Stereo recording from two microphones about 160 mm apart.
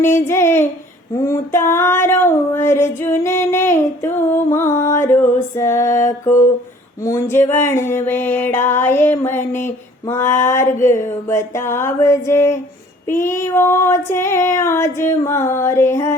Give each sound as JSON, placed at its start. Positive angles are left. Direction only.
{"t": 0.0, "sound": "music", "side_deg": 15}